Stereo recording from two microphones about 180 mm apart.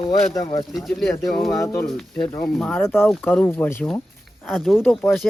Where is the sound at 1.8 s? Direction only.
5° left (ahead or behind).